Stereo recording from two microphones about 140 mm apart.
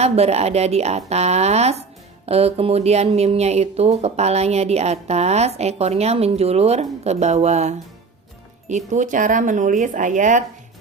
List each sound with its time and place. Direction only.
0.0 s speech: 50° right (ahead or behind)